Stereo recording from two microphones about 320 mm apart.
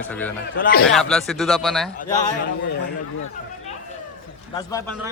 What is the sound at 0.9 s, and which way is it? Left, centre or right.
Speech, centre.